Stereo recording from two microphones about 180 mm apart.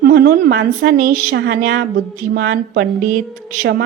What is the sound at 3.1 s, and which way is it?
Speech, 50° right (ahead or behind).